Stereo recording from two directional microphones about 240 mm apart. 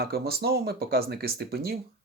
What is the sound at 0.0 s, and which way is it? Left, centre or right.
Speech, right.